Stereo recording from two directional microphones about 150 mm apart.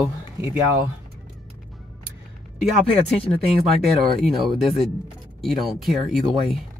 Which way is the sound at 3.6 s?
Centre (ahead or behind).